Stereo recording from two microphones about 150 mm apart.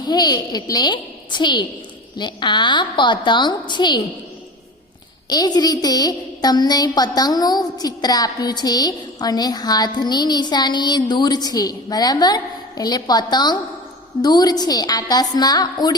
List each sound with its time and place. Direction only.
0.0 s a woman's voice: 25° left (ahead or behind)
5.3 s a woman's voice: 25° left (ahead or behind)